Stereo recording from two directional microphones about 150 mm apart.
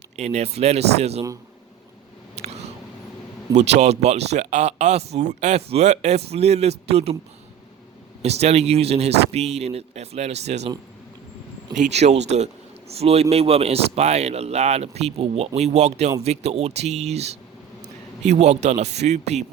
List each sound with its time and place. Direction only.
0.2 s speech: 45° right (ahead or behind)
2.4 s a sound: 45° right (ahead or behind)
3.5 s speech: 50° right (ahead or behind)
8.2 s speech: 45° right (ahead or behind)
11.7 s a man's voice: 50° right (ahead or behind)